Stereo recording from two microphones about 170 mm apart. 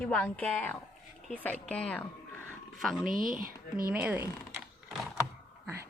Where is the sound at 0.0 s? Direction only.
5° left (ahead or behind).